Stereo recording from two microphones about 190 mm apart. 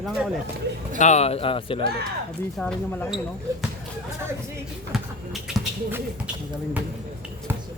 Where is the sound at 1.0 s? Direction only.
35° left (ahead or behind).